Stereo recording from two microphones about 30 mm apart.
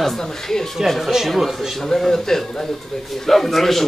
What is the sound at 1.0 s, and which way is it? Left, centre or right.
Speech, centre.